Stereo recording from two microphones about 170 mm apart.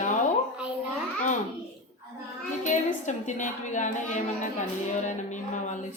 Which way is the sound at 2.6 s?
45° left (ahead or behind).